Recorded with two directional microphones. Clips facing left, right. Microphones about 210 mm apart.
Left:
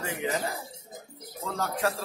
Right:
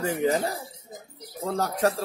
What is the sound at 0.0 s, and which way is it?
A man's voice, 40° right (ahead or behind).